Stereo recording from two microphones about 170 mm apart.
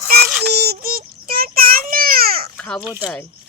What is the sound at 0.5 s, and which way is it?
Child singing, 65° right (ahead or behind).